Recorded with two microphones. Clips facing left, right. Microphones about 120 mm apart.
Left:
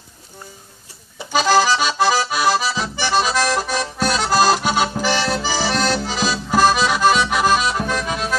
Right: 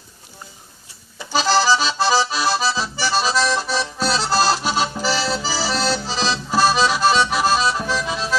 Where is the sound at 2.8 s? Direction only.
55° left (ahead or behind).